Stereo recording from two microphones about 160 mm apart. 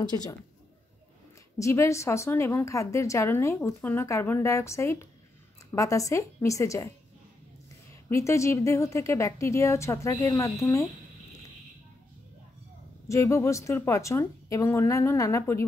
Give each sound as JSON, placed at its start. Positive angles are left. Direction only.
{"t": 0.0, "sound": "a woman's voice", "side_deg": 25}
{"t": 1.6, "sound": "a woman's voice", "side_deg": 20}
{"t": 8.1, "sound": "a woman's voice", "side_deg": 20}
{"t": 13.1, "sound": "a woman's voice", "side_deg": 20}